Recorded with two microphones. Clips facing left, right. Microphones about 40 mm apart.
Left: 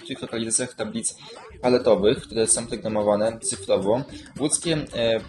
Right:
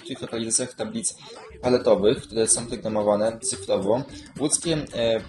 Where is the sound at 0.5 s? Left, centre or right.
Left.